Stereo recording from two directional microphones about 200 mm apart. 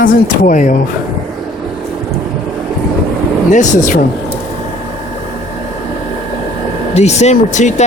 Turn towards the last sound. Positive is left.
turn(degrees=35)  # may be behind; listen again after turning